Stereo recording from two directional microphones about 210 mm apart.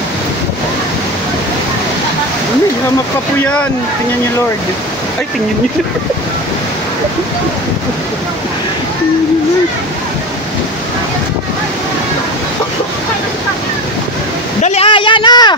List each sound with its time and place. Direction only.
3.3 s speech: 5° left (ahead or behind)
14.6 s speech: 30° left (ahead or behind)